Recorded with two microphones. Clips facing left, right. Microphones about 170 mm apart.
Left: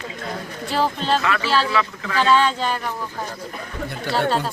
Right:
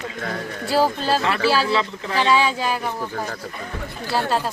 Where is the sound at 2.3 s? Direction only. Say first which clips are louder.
Left 1 dB; 5° right (ahead or behind).